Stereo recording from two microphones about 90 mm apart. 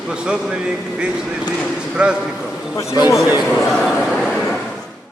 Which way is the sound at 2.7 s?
40° left (ahead or behind).